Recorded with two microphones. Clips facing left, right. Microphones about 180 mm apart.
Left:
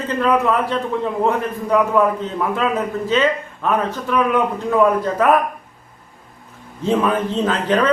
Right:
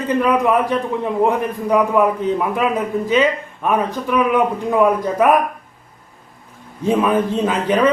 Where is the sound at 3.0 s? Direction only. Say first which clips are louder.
Right 1 dB; 15° right (ahead or behind).